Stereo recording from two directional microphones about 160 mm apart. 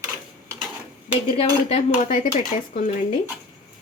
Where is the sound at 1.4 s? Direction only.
40° left (ahead or behind).